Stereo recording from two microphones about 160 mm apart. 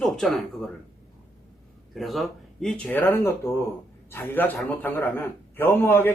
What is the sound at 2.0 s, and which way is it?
A man's voice, centre (ahead or behind).